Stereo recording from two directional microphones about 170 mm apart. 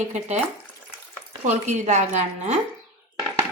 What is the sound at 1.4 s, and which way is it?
A woman's voice, 45° right (ahead or behind).